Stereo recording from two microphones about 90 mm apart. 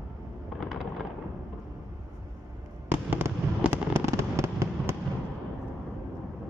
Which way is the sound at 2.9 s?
25° right (ahead or behind).